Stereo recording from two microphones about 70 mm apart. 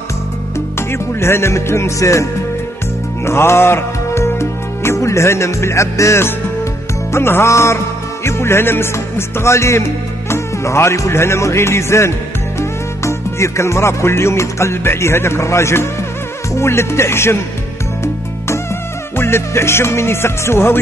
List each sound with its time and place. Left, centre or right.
0.7 s music: left
3.3 s music: left
19.1 s music: left